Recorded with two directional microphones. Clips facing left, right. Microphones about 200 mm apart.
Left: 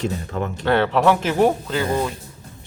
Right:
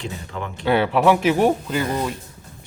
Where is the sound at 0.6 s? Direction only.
10° right (ahead or behind).